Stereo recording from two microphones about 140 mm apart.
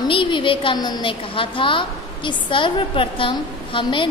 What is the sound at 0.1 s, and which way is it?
A woman's voice, 35° left (ahead or behind).